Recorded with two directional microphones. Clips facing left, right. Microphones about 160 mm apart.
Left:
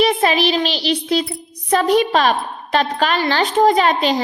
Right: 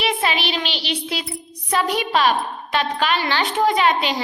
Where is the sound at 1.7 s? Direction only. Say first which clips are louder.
Left 6 dB; 40° left (ahead or behind).